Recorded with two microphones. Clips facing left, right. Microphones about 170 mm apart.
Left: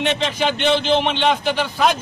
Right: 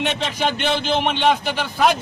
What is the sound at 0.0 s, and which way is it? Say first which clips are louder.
A man's voice: left 2 dB; 10° right (ahead or behind).